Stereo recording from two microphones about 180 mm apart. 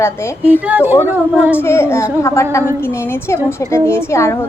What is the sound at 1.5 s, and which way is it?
A woman's voice, 15° left (ahead or behind).